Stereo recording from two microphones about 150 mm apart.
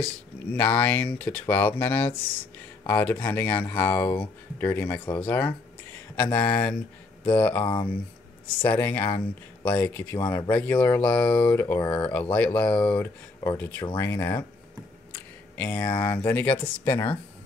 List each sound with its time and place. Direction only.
0.0 s speech: 10° left (ahead or behind)
7.6 s speech: 30° left (ahead or behind)
8.6 s speech: 10° left (ahead or behind)
9.1 s speech: 30° left (ahead or behind)
9.8 s speech: 10° left (ahead or behind)
10.2 s speech: 25° left (ahead or behind)
10.5 s speech: 10° left (ahead or behind)
15.5 s speech: 10° left (ahead or behind)